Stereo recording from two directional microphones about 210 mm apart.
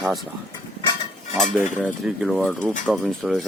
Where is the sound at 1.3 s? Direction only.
Centre (ahead or behind).